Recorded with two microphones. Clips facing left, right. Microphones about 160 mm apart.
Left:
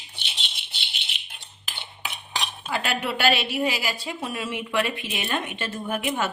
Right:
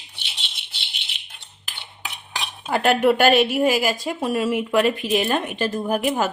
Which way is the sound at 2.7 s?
50° right (ahead or behind).